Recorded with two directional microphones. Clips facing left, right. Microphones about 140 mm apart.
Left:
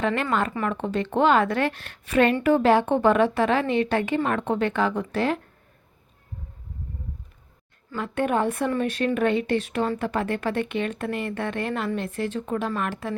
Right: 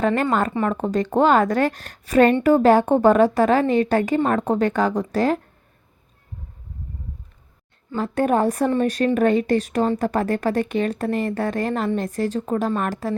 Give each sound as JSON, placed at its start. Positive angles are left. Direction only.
{"t": 0.0, "sound": "a woman's voice", "side_deg": -40}
{"t": 7.9, "sound": "a woman's voice", "side_deg": -40}